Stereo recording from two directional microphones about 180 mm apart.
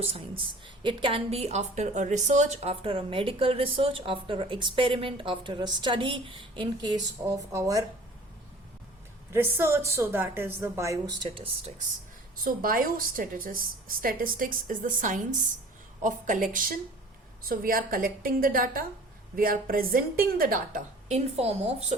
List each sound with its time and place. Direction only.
0.0 s a woman's voice: 30° right (ahead or behind)
9.3 s a woman's voice: 15° right (ahead or behind)
12.5 s a woman's voice: 50° right (ahead or behind); by 21.9 s 35° right (ahead or behind)